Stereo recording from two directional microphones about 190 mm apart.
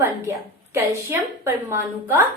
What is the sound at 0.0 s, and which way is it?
A woman's voice, 15° right (ahead or behind).